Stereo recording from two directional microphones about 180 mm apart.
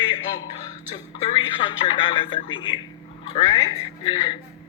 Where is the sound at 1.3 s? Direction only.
30° left (ahead or behind).